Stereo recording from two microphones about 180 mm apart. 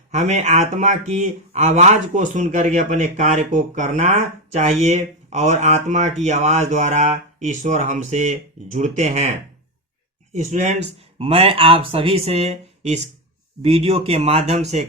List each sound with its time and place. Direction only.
0.1 s speech: 40° right (ahead or behind)
10.3 s speech: 40° right (ahead or behind)